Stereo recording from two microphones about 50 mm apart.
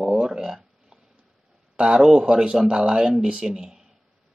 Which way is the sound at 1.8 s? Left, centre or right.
Centre.